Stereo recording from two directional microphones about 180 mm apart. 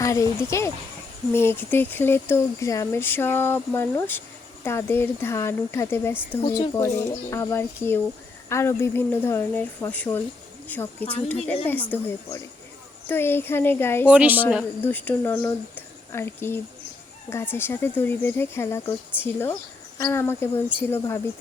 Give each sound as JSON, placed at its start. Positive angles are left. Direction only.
{"t": 0.0, "sound": "speech", "side_deg": 15}
{"t": 14.1, "sound": "a woman's voice", "side_deg": -10}
{"t": 14.8, "sound": "speech", "side_deg": 10}